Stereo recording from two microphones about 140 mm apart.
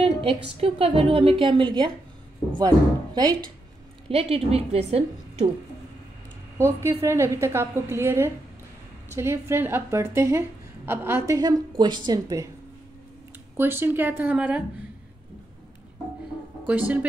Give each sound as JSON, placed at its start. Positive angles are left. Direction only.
{"t": 0.0, "sound": "a woman's voice", "side_deg": -45}
{"t": 4.1, "sound": "a woman's voice", "side_deg": -45}
{"t": 6.6, "sound": "a woman's voice", "side_deg": -20}
{"t": 11.3, "sound": "a woman's voice", "side_deg": -30}
{"t": 13.6, "sound": "a woman's voice", "side_deg": -15}
{"t": 16.6, "sound": "a woman's voice", "side_deg": -10}